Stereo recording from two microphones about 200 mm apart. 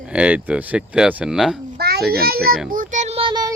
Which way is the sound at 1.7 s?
50° right (ahead or behind).